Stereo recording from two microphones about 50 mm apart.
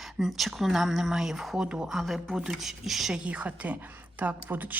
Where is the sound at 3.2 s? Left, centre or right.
Right.